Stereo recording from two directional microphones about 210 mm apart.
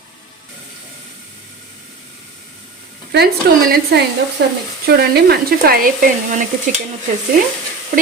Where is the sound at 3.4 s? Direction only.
50° right (ahead or behind).